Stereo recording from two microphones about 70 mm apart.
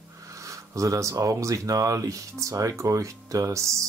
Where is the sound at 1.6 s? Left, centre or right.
Right.